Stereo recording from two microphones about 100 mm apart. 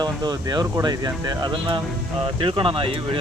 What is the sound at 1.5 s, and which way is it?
Speech, 55° right (ahead or behind).